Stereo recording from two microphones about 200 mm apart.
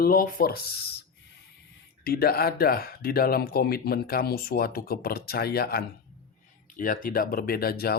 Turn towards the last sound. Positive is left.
turn(degrees=50)  # may be behind; listen again after turning